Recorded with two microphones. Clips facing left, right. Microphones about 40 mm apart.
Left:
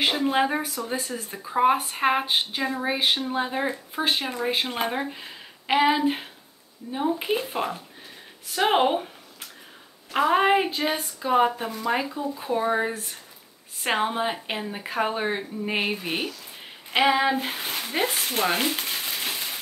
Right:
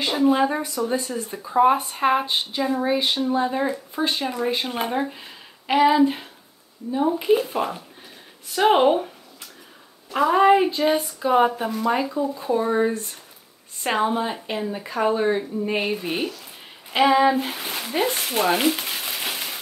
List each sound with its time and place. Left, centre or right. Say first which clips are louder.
0.1 s speech: right 4 dB; centre
0.8 s speech: right 5 dB; centre
2.2 s speech: even; left
2.6 s speech: right 5 dB; centre
3.0 s speech: right 1 dB; left
3.4 s speech: right 4 dB; centre
7.3 s speech: right 4 dB; centre
10.1 s speech: right 4 dB; left
10.9 s speech: right 4 dB; centre
12.4 s speech: right 2 dB; centre
14.0 s speech: right 2 dB; centre
17.6 s speech: right 2 dB; centre
18.8 s crushing: right 1 dB; centre